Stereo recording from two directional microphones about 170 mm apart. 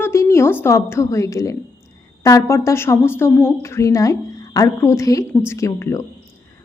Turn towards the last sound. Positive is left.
turn(degrees=15)  # may be behind; listen again after turning